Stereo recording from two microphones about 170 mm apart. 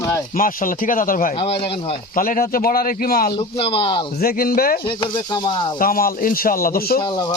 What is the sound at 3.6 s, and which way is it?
Speech, 35° left (ahead or behind).